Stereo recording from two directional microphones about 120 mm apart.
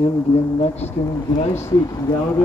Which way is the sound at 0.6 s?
60° left (ahead or behind).